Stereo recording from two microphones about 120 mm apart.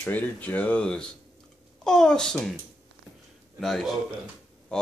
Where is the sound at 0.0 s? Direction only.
15° left (ahead or behind).